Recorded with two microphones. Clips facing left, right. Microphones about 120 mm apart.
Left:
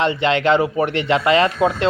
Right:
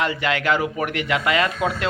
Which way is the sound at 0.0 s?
25° left (ahead or behind).